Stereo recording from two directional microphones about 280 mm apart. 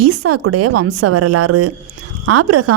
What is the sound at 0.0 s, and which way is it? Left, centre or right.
A woman's voice, right.